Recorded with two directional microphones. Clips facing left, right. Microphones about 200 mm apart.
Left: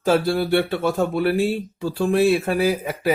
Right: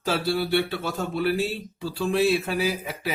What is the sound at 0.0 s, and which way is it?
Speech, 50° left (ahead or behind).